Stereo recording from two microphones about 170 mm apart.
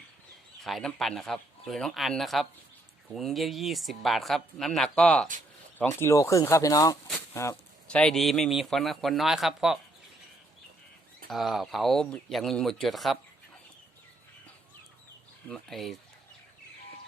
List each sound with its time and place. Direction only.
0.6 s speech: centre (ahead or behind)
7.9 s speech: 5° left (ahead or behind)
11.3 s speech: centre (ahead or behind)
15.4 s speech: centre (ahead or behind)